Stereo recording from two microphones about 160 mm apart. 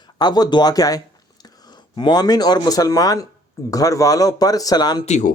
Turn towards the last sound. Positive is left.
turn(degrees=45)  # may be behind; listen again after turning